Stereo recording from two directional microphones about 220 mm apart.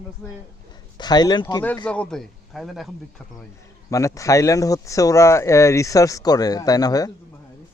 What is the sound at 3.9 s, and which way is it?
Speech, 15° left (ahead or behind).